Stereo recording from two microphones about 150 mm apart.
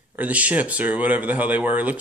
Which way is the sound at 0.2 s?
10° right (ahead or behind).